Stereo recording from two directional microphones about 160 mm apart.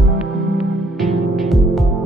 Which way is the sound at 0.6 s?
Centre (ahead or behind).